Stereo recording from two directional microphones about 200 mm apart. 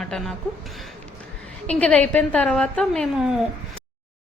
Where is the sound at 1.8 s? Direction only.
10° left (ahead or behind).